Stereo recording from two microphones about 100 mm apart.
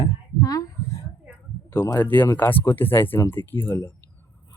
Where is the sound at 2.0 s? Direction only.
20° left (ahead or behind).